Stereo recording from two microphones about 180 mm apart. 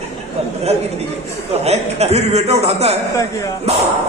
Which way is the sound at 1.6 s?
35° right (ahead or behind).